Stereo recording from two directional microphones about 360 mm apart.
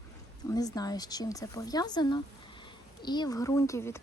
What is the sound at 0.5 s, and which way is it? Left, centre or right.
Speech, centre.